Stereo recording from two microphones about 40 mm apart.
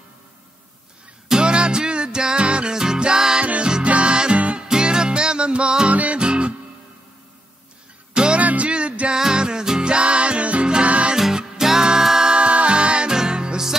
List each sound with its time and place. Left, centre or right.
1.3 s music: right
3.8 s music: right
5.9 s music: right
8.1 s music: right
8.4 s music: right
9.1 s music: centre
11.1 s music: centre
12.3 s music: right